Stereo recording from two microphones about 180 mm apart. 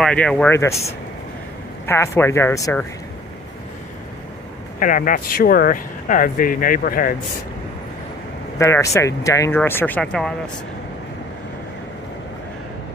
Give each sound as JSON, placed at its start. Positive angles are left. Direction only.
{"t": 0.0, "sound": "speech", "side_deg": 5}
{"t": 1.9, "sound": "speech", "side_deg": 15}
{"t": 4.7, "sound": "speech", "side_deg": 45}
{"t": 8.5, "sound": "speech", "side_deg": 15}